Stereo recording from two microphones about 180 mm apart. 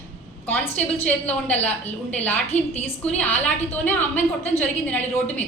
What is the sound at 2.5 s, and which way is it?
Speech, 35° left (ahead or behind).